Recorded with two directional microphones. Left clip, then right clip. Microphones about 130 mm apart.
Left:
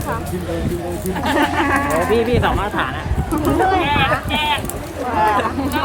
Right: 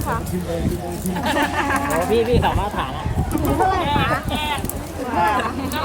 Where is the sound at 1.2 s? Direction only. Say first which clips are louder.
Left 3 dB; 10° right (ahead or behind).